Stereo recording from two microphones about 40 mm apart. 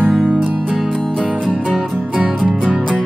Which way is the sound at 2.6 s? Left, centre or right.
Centre.